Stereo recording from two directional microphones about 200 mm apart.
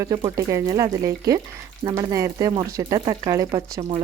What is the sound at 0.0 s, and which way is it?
A woman's voice, 20° right (ahead or behind).